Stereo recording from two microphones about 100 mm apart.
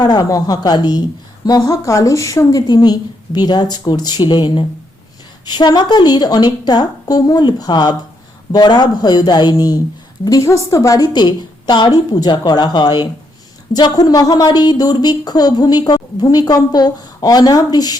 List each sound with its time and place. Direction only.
0.0 s a woman's voice: 40° left (ahead or behind)